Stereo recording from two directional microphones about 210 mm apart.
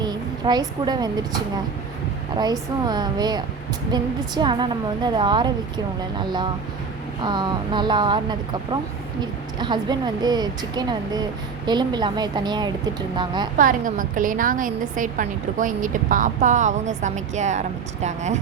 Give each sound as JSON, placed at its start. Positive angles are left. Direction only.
{"t": 0.0, "sound": "a sound", "side_deg": -20}
{"t": 2.4, "sound": "speech", "side_deg": -20}
{"t": 13.6, "sound": "a woman's voice", "side_deg": -40}